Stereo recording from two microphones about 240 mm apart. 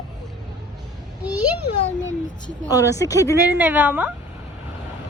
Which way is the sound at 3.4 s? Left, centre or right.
Centre.